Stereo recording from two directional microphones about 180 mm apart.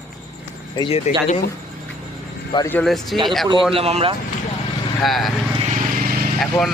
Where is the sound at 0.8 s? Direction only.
35° left (ahead or behind).